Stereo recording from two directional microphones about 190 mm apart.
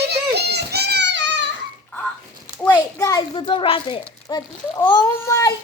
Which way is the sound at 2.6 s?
15° left (ahead or behind).